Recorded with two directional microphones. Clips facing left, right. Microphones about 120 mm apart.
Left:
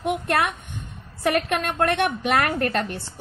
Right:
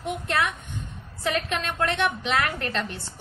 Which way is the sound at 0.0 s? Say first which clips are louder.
Left 4 dB; 60° left (ahead or behind).